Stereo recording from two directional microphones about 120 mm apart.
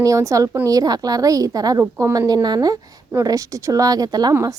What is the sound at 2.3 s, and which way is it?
A woman's voice, 35° right (ahead or behind).